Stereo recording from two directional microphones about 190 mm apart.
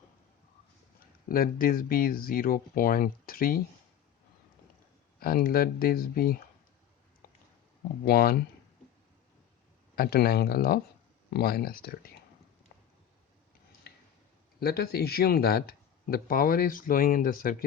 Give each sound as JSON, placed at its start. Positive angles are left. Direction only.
{"t": 1.3, "sound": "speech", "side_deg": 50}
{"t": 5.2, "sound": "speech", "side_deg": 50}
{"t": 8.0, "sound": "speech", "side_deg": 55}
{"t": 9.9, "sound": "speech", "side_deg": 55}
{"t": 14.6, "sound": "speech", "side_deg": 55}